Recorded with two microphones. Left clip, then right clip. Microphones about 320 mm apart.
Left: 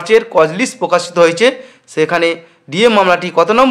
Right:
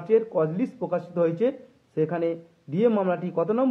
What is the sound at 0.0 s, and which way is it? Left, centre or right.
Speech, right.